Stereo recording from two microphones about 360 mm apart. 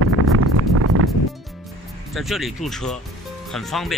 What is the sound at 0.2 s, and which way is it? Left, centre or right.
Wind noise, right.